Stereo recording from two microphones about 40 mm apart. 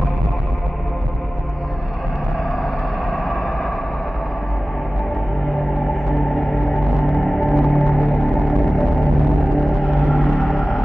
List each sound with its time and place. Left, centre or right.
6.0 s gong: centre
7.1 s music: centre
9.8 s a sound: centre